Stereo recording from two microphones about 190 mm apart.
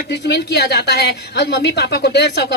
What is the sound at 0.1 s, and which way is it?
A woman's voice, 60° left (ahead or behind).